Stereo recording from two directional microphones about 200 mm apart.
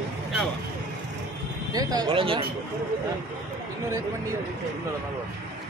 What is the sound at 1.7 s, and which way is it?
Speech, 20° right (ahead or behind).